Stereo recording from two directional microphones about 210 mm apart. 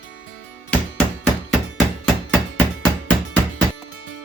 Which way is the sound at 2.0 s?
5° left (ahead or behind).